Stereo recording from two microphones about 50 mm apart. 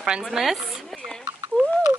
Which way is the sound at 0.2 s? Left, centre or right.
Centre.